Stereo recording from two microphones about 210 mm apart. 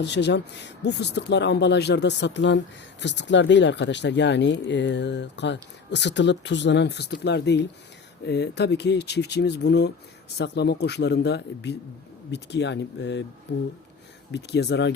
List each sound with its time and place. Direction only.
0.0 s speech: 55° left (ahead or behind)